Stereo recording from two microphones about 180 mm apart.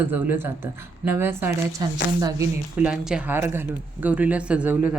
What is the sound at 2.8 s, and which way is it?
Speech, 5° right (ahead or behind).